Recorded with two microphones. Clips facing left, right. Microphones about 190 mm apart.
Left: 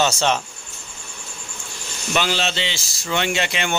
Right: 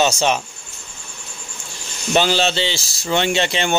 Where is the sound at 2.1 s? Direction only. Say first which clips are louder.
Right 5 dB; 30° right (ahead or behind).